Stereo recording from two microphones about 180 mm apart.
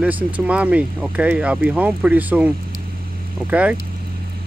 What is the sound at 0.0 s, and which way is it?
Speech, 5° right (ahead or behind).